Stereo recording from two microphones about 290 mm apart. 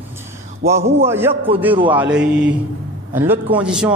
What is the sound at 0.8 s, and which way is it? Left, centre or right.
Speech, right.